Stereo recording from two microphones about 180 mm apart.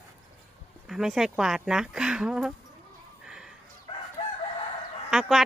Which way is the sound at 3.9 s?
25° left (ahead or behind).